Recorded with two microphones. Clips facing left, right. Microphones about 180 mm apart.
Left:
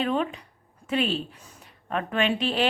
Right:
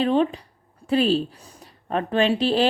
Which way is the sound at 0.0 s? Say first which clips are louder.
Right 6 dB; 30° right (ahead or behind).